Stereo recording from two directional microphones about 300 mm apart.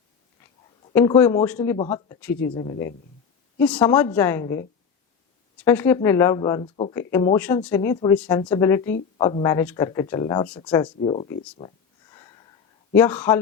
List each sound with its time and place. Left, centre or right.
0.9 s speech: centre
7.3 s speech: centre
11.0 s speech: centre
12.9 s speech: centre